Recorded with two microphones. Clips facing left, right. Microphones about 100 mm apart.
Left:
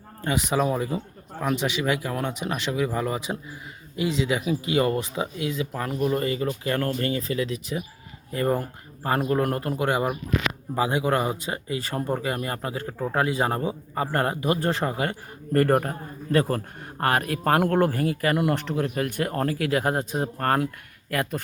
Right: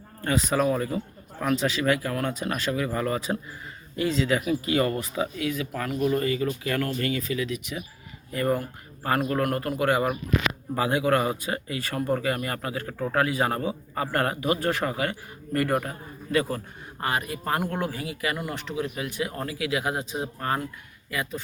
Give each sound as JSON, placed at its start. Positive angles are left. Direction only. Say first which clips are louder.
{"t": 0.2, "sound": "speech", "louder": "even", "side_deg": 15}
{"t": 15.5, "sound": "speech", "louder": "left 5 dB", "side_deg": 40}
{"t": 17.0, "sound": "speech", "louder": "left 5 dB", "side_deg": 55}